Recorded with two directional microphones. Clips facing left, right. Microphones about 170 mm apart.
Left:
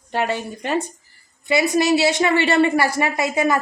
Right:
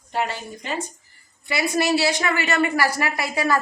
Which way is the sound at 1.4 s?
20° left (ahead or behind).